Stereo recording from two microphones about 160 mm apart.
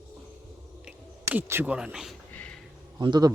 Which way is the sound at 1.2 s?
15° right (ahead or behind).